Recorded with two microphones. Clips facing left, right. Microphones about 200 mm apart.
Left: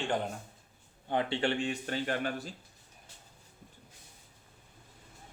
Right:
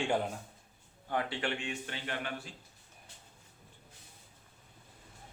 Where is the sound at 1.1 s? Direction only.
25° left (ahead or behind); by 2.5 s 40° left (ahead or behind).